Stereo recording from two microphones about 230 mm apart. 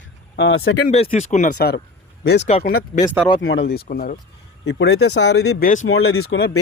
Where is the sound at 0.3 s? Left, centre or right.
Left.